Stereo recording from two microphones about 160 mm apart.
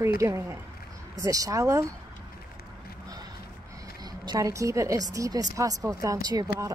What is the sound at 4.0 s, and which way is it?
A woman's voice, 25° right (ahead or behind).